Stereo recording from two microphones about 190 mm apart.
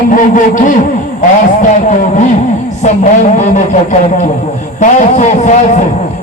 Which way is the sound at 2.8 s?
40° left (ahead or behind).